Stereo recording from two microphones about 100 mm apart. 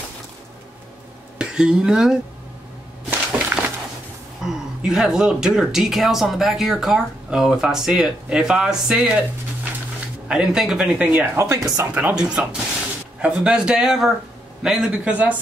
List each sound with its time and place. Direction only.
1.4 s speech: 5° right (ahead or behind)
3.1 s a sound: 20° right (ahead or behind)
4.5 s speech: 5° right (ahead or behind)
11.3 s speech: 35° right (ahead or behind)
11.9 s a man's voice: 15° right (ahead or behind)